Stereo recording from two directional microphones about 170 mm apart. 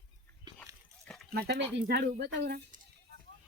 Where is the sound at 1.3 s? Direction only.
70° right (ahead or behind).